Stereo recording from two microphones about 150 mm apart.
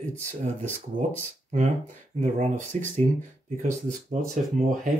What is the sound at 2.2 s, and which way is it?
Speech, 55° right (ahead or behind).